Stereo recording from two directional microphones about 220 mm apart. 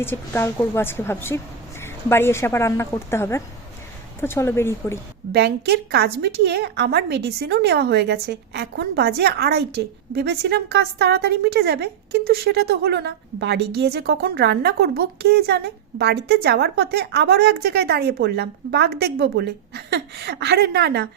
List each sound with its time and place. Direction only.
0.0 s a woman's voice: 10° left (ahead or behind)
5.3 s a woman's voice: 45° right (ahead or behind)